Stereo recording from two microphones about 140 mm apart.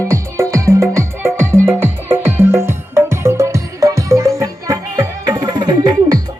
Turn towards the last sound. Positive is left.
turn(degrees=-25)  # may be behind; listen again after turning